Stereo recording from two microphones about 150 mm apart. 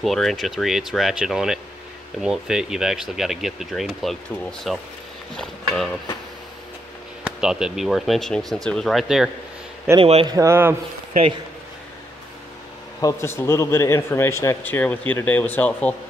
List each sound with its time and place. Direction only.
0.0 s speech: centre (ahead or behind)
7.2 s speech: 5° right (ahead or behind)
9.9 s a man's voice: 45° right (ahead or behind)
10.2 s a man's voice: 20° right (ahead or behind)
13.0 s speech: 15° left (ahead or behind)